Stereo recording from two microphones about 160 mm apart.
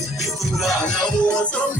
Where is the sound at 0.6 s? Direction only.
Centre (ahead or behind).